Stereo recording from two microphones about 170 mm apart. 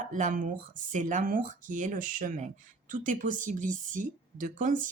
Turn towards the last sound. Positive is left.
turn(degrees=-50)  # may be behind; listen again after turning